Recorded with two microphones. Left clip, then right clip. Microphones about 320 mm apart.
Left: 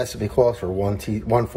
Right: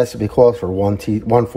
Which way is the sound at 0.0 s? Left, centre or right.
Right.